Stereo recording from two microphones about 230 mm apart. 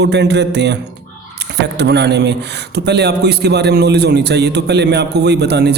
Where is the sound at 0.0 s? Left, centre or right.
Right.